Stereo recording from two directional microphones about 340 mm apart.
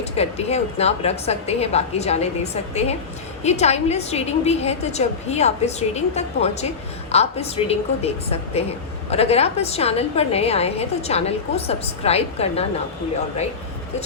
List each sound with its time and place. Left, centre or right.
0.0 s a woman's voice: centre